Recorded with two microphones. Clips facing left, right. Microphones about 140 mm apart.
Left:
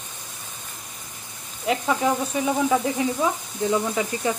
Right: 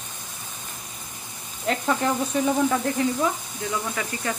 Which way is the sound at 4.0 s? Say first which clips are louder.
Left 5 dB; 20° left (ahead or behind).